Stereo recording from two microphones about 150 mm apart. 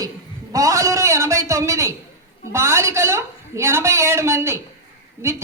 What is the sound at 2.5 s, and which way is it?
A man's voice, 20° right (ahead or behind).